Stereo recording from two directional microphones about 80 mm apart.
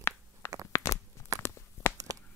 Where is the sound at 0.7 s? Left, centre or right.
Left.